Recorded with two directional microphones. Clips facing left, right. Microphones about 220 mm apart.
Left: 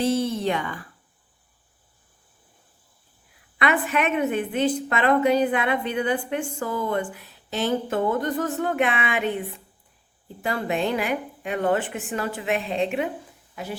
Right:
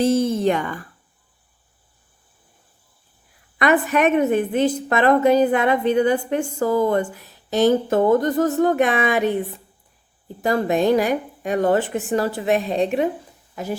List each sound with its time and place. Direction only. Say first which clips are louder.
0.0 s speech: right 5 dB; 45° right (ahead or behind)
3.6 s a woman's voice: right 6 dB; 40° right (ahead or behind)
10.4 s a woman's voice: right 7 dB; 40° right (ahead or behind)